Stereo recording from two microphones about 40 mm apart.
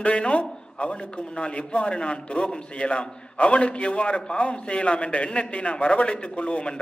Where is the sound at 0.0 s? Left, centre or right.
Left.